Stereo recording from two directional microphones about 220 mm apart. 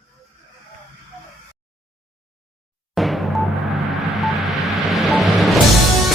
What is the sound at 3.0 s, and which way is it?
Music, centre (ahead or behind).